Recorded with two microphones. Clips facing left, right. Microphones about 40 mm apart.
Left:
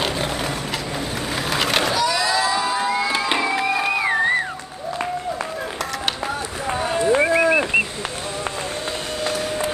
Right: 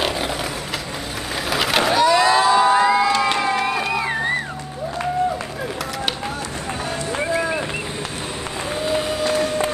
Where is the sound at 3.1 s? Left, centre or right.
Centre.